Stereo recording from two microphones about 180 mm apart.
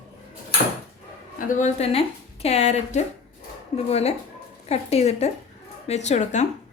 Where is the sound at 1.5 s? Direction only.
40° left (ahead or behind).